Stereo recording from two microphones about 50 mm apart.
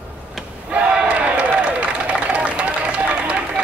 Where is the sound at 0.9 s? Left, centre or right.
Right.